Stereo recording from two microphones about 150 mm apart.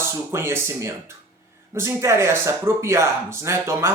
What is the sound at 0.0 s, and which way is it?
Speech, 15° right (ahead or behind).